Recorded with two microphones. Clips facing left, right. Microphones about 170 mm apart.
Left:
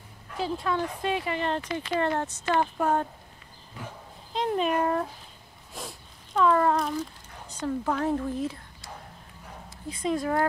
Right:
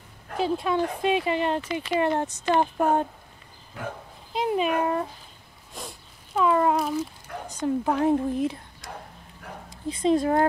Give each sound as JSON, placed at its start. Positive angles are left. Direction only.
{"t": 0.4, "sound": "speech", "side_deg": -20}
{"t": 4.3, "sound": "speech", "side_deg": -10}
{"t": 5.8, "sound": "wail", "side_deg": 0}
{"t": 6.4, "sound": "speech", "side_deg": -10}
{"t": 7.4, "sound": "speech", "side_deg": -15}
{"t": 9.7, "sound": "speech", "side_deg": -25}